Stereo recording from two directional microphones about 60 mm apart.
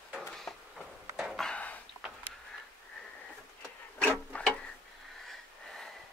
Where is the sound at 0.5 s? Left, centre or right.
Centre.